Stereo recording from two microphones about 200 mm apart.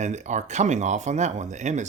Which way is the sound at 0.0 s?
35° right (ahead or behind).